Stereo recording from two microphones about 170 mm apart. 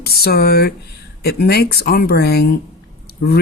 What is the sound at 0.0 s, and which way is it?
Speech, 65° left (ahead or behind).